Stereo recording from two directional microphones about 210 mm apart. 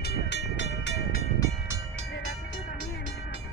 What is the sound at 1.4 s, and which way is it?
Train, 15° left (ahead or behind).